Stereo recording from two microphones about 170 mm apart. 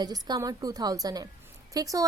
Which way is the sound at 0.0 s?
25° right (ahead or behind).